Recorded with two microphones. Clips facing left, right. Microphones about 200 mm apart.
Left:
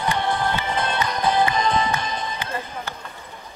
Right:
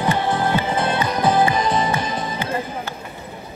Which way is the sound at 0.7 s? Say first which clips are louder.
Right 4 dB; 5° right (ahead or behind).